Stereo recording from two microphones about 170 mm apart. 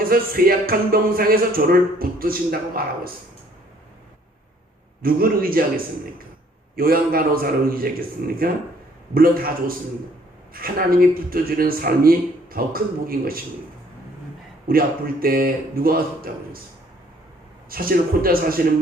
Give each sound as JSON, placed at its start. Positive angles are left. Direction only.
{"t": 0.0, "sound": "speech", "side_deg": -60}
{"t": 5.0, "sound": "speech", "side_deg": -60}
{"t": 9.1, "sound": "speech", "side_deg": -60}
{"t": 14.7, "sound": "speech", "side_deg": -60}
{"t": 17.7, "sound": "speech", "side_deg": -60}